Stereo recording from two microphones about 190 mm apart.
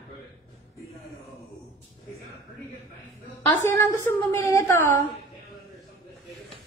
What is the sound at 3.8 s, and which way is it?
A man's voice, 15° left (ahead or behind).